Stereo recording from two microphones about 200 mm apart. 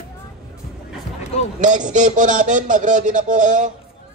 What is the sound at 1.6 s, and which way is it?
A man's voice, 40° right (ahead or behind).